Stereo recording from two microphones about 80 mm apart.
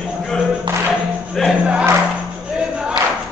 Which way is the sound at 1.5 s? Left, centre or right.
Centre.